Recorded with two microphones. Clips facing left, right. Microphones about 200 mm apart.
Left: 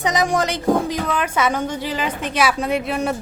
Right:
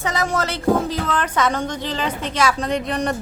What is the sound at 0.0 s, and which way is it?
A woman's voice, 15° left (ahead or behind).